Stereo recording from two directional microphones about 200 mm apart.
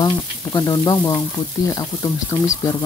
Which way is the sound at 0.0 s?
20° left (ahead or behind).